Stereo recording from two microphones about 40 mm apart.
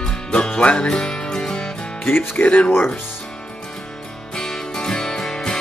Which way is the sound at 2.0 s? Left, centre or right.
Left.